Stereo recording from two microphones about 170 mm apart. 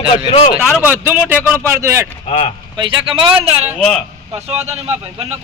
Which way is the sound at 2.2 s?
35° left (ahead or behind).